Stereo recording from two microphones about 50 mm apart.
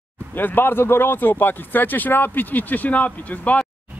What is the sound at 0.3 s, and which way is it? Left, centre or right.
Speech, left.